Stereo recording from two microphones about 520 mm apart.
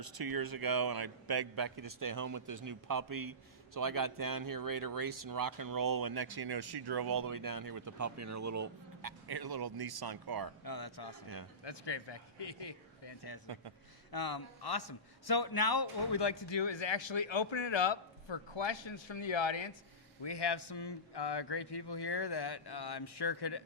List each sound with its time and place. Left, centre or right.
0.0 s speech: right
10.6 s a man's voice: left